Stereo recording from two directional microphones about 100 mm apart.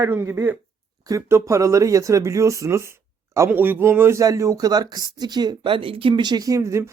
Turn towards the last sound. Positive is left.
turn(degrees=-30)  # may be behind; listen again after turning